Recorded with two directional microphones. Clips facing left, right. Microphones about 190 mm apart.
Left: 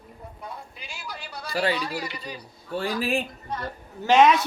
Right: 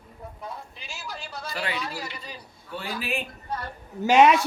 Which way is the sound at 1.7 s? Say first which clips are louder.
Left 3 dB; centre (ahead or behind).